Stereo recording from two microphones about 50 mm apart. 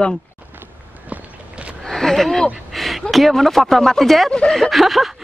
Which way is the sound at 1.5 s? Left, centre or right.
Right.